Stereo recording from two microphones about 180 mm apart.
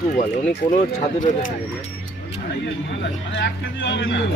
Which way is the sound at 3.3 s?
90° left.